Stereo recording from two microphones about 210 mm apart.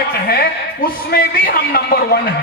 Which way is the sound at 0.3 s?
45° left (ahead or behind).